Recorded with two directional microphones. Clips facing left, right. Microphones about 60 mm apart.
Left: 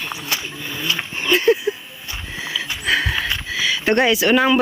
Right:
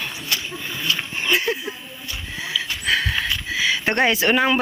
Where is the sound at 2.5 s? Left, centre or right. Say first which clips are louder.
Left 2 dB; centre.